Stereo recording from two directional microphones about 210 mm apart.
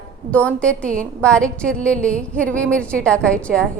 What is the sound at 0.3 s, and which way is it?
A woman's voice, 5° left (ahead or behind).